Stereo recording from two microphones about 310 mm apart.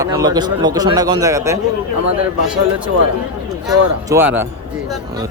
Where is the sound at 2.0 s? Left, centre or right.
Right.